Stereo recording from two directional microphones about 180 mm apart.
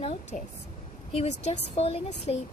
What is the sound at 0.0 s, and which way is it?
A woman's voice, 30° left (ahead or behind).